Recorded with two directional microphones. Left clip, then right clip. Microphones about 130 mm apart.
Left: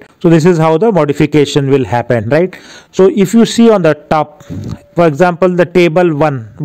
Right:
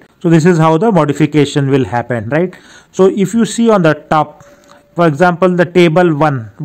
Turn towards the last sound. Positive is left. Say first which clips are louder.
# even
turn(degrees=35)  # may be behind; listen again after turning